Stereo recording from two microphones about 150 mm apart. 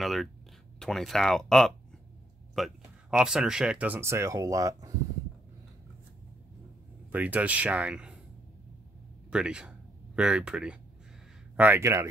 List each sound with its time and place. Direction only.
0.0 s speech: centre (ahead or behind); by 4.9 s 20° right (ahead or behind)
7.1 s speech: 10° right (ahead or behind)
9.3 s speech: 5° right (ahead or behind)